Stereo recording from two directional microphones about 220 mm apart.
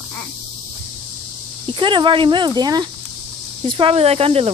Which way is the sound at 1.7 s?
20° right (ahead or behind).